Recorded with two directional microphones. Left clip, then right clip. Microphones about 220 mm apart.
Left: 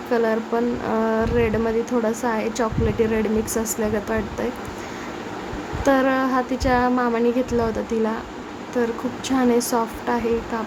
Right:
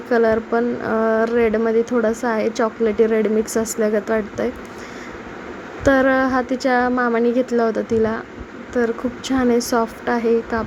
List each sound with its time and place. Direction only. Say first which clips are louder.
0.1 s speech: right 4 dB; 15° right (ahead or behind)
5.8 s speech: right 3 dB; 15° right (ahead or behind)